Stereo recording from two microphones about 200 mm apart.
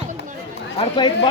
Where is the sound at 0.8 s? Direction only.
25° left (ahead or behind).